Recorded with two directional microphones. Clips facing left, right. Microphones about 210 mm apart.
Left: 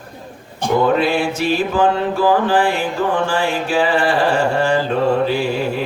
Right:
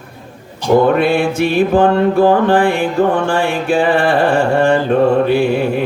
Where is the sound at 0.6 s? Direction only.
55° left (ahead or behind).